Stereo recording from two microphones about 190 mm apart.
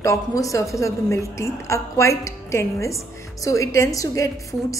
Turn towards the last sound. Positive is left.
turn(degrees=15)  # may be behind; listen again after turning